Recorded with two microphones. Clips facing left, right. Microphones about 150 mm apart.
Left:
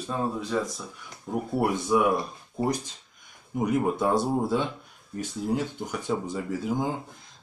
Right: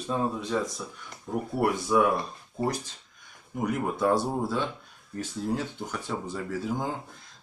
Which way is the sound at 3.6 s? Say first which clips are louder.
Left 2 dB; 20° left (ahead or behind).